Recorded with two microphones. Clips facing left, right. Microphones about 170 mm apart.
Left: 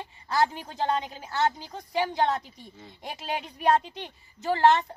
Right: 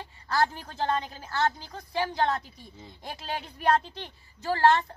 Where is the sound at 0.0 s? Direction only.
20° left (ahead or behind).